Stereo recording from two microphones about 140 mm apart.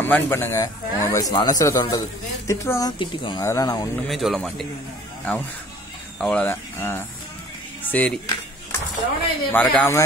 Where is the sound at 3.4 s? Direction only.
25° left (ahead or behind).